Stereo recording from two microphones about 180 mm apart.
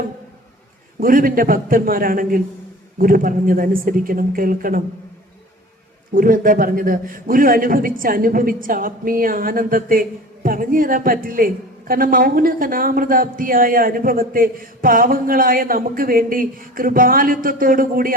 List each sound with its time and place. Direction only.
0.9 s a man's voice: 50° right (ahead or behind)
6.1 s a man's voice: 50° right (ahead or behind)